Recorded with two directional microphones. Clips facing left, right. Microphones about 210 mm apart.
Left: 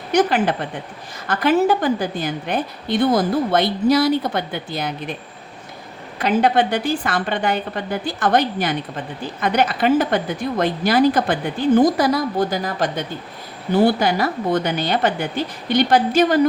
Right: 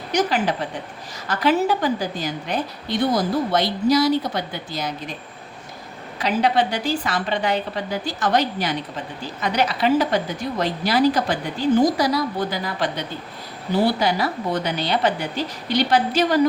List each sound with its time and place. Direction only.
0.1 s a woman's voice: 55° left (ahead or behind)
6.1 s a woman's voice: 55° left (ahead or behind)